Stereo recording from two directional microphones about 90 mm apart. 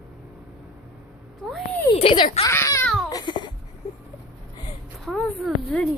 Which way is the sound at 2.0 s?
80° left.